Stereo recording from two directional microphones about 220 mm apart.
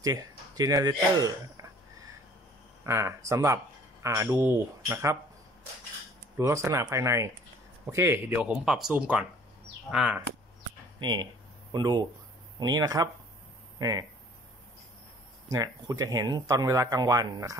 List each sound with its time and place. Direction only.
0.0 s speech: 15° right (ahead or behind)
6.3 s speech: 15° right (ahead or behind)
11.0 s speech: 20° right (ahead or behind)
15.5 s speech: 15° right (ahead or behind)